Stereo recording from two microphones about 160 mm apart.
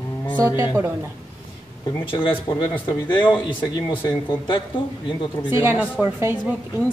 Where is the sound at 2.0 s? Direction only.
30° left (ahead or behind).